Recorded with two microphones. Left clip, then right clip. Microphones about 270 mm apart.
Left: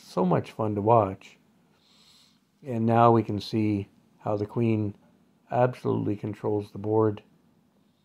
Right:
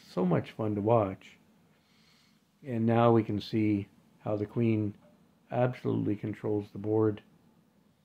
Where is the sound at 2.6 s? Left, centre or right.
Centre.